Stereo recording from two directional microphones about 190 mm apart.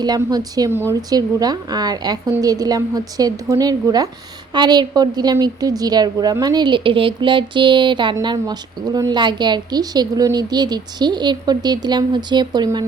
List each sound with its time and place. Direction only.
0.0 s a woman's voice: 20° right (ahead or behind)